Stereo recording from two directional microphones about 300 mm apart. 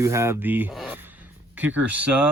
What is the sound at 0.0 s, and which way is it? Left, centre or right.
Speech, centre.